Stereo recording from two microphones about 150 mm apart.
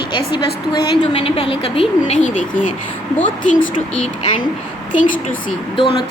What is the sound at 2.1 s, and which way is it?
Speech, 55° left (ahead or behind).